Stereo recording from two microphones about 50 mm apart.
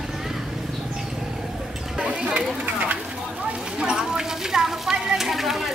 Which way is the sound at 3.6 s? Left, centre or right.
Centre.